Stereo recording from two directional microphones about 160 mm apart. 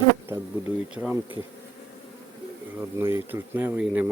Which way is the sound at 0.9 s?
10° right (ahead or behind).